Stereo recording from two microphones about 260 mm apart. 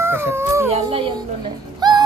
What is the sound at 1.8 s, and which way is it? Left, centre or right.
Music, centre.